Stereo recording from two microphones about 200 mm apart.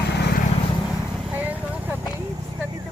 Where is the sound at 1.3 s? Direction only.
10° right (ahead or behind).